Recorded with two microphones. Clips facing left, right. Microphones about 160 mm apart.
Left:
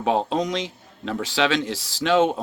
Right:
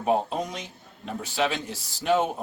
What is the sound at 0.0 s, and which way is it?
Speech, 90° left.